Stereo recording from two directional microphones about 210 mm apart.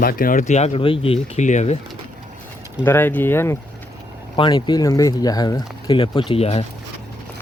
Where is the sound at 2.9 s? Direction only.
10° left (ahead or behind).